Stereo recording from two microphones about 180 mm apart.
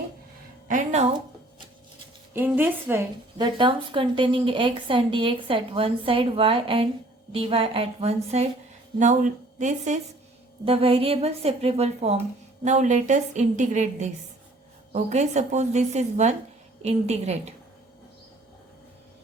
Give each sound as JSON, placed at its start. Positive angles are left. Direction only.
{"t": 0.7, "sound": "a woman's voice", "side_deg": -45}
{"t": 2.3, "sound": "a woman's voice", "side_deg": -10}
{"t": 3.3, "sound": "a woman's voice", "side_deg": -25}
{"t": 10.7, "sound": "a woman's voice", "side_deg": -30}